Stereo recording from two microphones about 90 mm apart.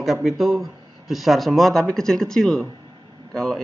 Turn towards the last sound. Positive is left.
turn(degrees=5)  # may be behind; listen again after turning